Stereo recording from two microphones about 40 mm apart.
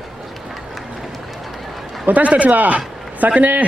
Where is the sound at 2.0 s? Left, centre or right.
Right.